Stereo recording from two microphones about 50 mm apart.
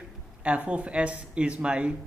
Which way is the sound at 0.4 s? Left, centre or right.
Right.